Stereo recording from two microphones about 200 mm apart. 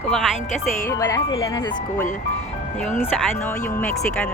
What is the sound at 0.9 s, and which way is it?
Speech, 15° left (ahead or behind).